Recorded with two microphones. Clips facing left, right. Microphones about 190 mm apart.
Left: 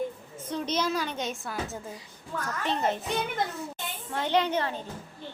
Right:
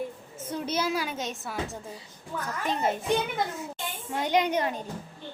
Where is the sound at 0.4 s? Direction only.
10° right (ahead or behind).